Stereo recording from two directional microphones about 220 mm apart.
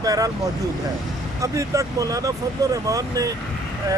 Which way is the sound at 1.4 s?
15° right (ahead or behind).